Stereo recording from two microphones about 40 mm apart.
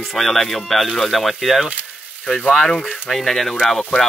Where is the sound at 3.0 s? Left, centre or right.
Centre.